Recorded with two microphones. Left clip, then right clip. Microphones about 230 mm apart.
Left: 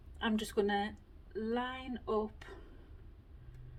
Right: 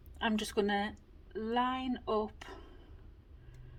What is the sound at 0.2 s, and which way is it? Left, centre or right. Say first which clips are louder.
Speech: right 1 dB; right.